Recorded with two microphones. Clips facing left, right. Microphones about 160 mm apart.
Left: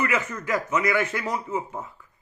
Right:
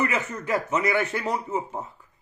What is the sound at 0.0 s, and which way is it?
A man's voice, 35° right (ahead or behind).